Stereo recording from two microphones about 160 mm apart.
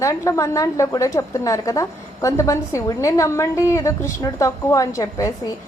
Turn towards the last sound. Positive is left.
turn(degrees=20)  # may be behind; listen again after turning